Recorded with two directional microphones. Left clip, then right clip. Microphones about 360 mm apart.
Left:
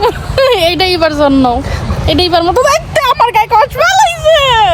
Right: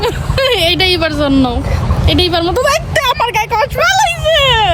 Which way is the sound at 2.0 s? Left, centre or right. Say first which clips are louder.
Left 3 dB; centre.